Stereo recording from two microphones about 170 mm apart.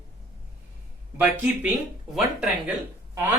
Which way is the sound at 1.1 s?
10° right (ahead or behind).